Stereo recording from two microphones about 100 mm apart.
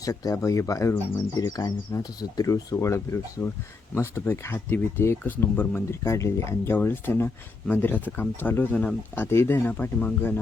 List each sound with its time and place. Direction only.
0.0 s speech: 35° left (ahead or behind); by 9.2 s 10° left (ahead or behind)
9.2 s speech: 25° left (ahead or behind)